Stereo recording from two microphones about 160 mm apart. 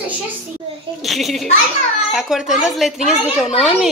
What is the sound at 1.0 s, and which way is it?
A woman's voice, centre (ahead or behind).